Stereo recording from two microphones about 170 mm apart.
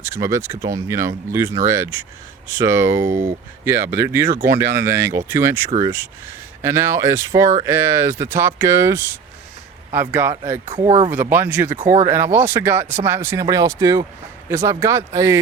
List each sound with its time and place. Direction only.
0.0 s speech: 15° right (ahead or behind)
3.1 s speech: 50° right (ahead or behind)
3.6 s speech: 15° right (ahead or behind)
10.8 s speech: 35° right (ahead or behind)
11.1 s speech: 10° right (ahead or behind)